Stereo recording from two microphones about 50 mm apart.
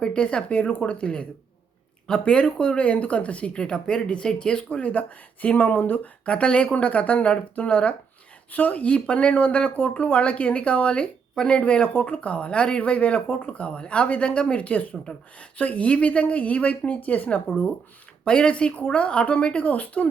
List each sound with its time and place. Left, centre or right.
0.0 s speech: centre; by 6.0 s left
6.2 s speech: left